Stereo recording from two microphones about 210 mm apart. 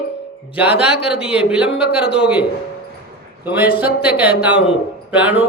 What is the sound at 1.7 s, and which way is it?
Speech, 50° left (ahead or behind).